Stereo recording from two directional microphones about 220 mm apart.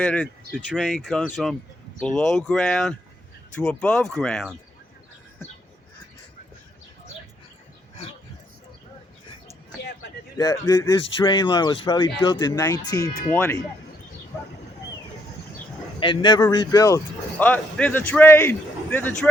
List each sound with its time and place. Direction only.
0.0 s speech: 5° left (ahead or behind)
9.8 s a sound: 50° left (ahead or behind)
10.3 s speech: 15° left (ahead or behind)
16.0 s speech: 20° left (ahead or behind)